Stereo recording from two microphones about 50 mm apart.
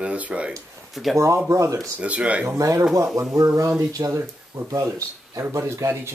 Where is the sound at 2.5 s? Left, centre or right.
Right.